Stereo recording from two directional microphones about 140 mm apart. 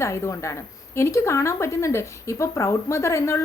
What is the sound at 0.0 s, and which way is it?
Speech, 20° left (ahead or behind).